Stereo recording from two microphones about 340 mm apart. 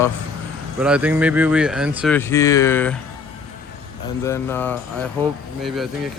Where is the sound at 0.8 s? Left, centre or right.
Centre.